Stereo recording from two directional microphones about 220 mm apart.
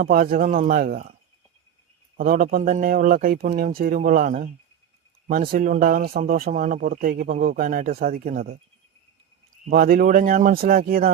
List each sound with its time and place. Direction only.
0.0 s speech: 40° right (ahead or behind)
2.1 s speech: 40° right (ahead or behind)
9.6 s speech: 40° right (ahead or behind)